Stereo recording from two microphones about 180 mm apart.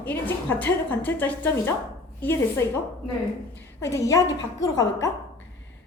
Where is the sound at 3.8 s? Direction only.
15° left (ahead or behind).